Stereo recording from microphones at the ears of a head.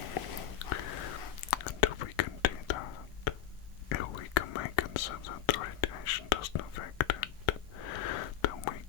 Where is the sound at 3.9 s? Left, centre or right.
Left.